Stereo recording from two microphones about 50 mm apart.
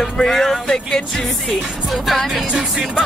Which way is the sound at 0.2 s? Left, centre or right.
Centre.